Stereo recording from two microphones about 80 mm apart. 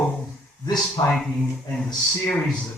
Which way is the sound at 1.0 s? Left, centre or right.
Left.